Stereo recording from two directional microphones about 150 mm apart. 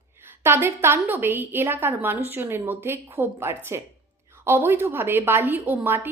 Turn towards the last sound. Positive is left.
turn(degrees=-10)  # may be behind; listen again after turning